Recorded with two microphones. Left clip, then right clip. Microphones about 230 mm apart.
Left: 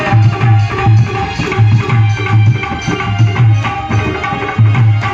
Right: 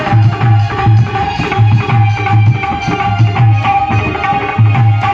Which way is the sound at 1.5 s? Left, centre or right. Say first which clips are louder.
Right 2 dB; right.